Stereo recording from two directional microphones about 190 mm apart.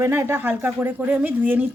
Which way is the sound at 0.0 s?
15° right (ahead or behind).